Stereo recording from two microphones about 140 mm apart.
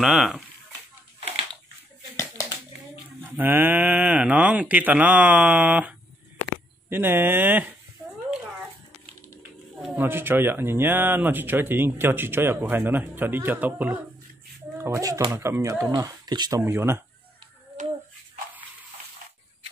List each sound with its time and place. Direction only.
0.0 s speech: 5° right (ahead or behind)
3.2 s speech: 15° right (ahead or behind)
9.9 s speech: 15° right (ahead or behind)
17.8 s a sound: 65° right (ahead or behind)